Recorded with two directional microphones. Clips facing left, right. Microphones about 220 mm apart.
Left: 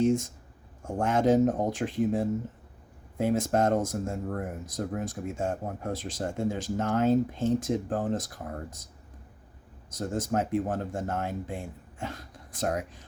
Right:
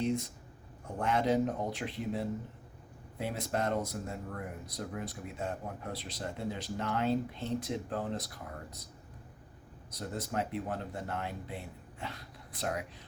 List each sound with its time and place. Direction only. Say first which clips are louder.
0.0 s speech: left 8 dB; 45° left (ahead or behind)
9.9 s speech: left 7 dB; 45° left (ahead or behind)